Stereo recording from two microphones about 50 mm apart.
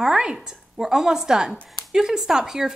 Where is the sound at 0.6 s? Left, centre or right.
Centre.